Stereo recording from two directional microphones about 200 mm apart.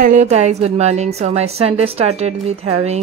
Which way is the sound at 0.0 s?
35° right (ahead or behind).